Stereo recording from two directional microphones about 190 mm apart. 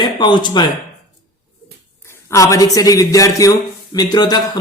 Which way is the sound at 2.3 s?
15° left (ahead or behind).